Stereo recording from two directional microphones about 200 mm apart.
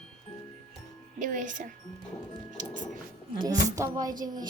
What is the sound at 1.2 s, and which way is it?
Speech, 40° right (ahead or behind).